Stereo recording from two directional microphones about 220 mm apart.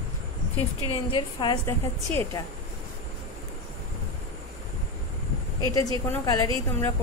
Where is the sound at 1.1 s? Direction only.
20° left (ahead or behind).